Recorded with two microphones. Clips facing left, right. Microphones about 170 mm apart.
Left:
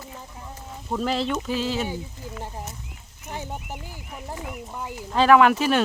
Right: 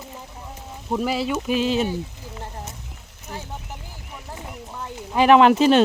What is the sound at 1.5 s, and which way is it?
Speech, 20° right (ahead or behind).